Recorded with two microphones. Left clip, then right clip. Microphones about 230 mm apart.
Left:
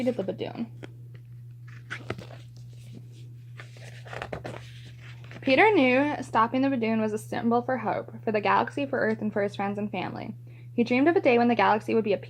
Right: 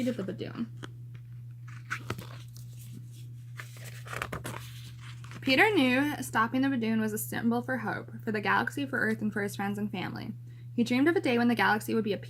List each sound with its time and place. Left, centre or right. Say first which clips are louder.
0.0 s speech: left 6 dB; centre
2.0 s a sound: left 3 dB; centre
3.8 s speech: even; centre